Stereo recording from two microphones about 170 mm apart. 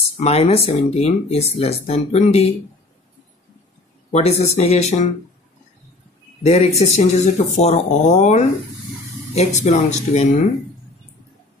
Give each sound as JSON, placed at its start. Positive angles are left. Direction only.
{"t": 0.2, "sound": "speech", "side_deg": 35}
{"t": 4.1, "sound": "speech", "side_deg": 40}
{"t": 6.4, "sound": "speech", "side_deg": 40}